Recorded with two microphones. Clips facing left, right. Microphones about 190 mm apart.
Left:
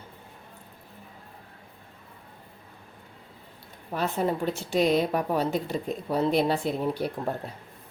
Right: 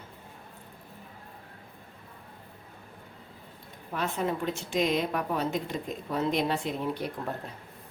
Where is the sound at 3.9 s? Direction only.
35° left (ahead or behind).